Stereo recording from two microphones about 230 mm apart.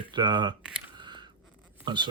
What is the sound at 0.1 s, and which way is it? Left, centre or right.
Speech, centre.